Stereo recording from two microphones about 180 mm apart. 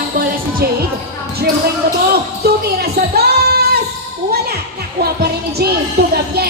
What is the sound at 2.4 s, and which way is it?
Music, 60° right (ahead or behind).